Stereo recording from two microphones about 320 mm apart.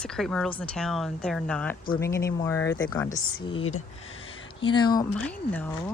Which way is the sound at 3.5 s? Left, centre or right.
Centre.